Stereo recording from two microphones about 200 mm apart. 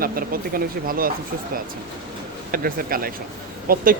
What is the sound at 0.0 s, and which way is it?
Speech, 45° right (ahead or behind).